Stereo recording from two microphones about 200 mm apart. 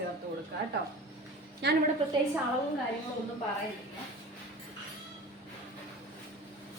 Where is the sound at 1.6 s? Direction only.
60° right (ahead or behind).